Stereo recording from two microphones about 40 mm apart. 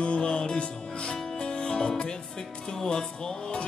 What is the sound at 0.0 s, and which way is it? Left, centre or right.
Music, left.